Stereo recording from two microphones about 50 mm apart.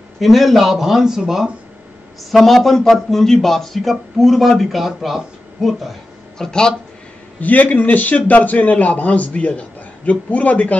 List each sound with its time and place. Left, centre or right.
0.2 s speech: centre
2.3 s a man's voice: centre
6.3 s speech: centre
7.3 s a man's voice: left